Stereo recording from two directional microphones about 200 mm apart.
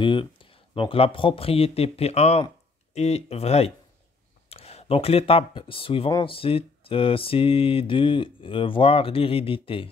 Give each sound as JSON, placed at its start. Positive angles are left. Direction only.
{"t": 0.0, "sound": "speech", "side_deg": 25}